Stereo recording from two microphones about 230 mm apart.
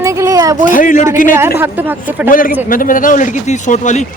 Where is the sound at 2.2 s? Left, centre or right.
Left.